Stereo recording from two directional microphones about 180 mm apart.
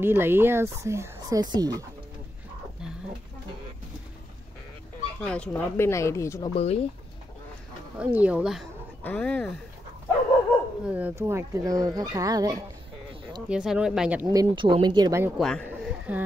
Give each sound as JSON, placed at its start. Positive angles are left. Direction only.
{"t": 0.0, "sound": "speech", "side_deg": -10}
{"t": 5.2, "sound": "speech", "side_deg": 5}
{"t": 6.5, "sound": "speech", "side_deg": 35}
{"t": 8.0, "sound": "speech", "side_deg": -10}
{"t": 9.0, "sound": "speech", "side_deg": 10}
{"t": 10.9, "sound": "speech", "side_deg": -10}
{"t": 13.5, "sound": "speech", "side_deg": -5}
{"t": 14.2, "sound": "speech", "side_deg": -20}
{"t": 15.3, "sound": "speech", "side_deg": 5}